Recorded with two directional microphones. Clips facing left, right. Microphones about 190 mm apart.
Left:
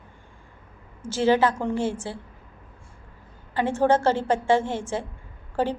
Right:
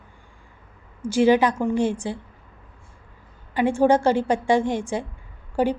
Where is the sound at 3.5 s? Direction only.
15° right (ahead or behind).